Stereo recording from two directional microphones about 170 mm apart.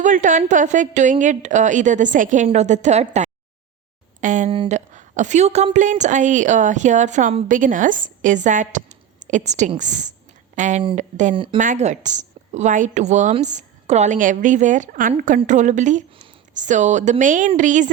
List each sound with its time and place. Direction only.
0.0 s a woman's voice: 50° right (ahead or behind)